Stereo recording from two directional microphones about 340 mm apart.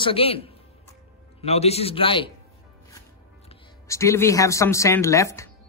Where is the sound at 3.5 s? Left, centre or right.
Centre.